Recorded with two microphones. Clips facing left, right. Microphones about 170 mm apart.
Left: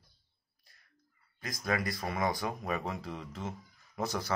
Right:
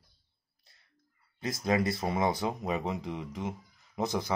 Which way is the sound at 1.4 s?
25° right (ahead or behind).